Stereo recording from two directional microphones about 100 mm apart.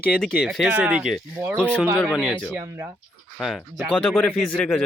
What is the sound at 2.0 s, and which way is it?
Speech, 5° left (ahead or behind).